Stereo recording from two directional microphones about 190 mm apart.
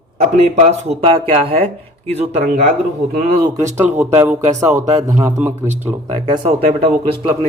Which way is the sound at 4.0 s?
10° right (ahead or behind).